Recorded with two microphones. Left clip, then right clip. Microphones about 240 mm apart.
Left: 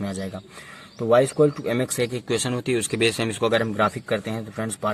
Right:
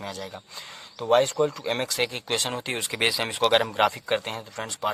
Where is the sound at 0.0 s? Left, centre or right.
Right.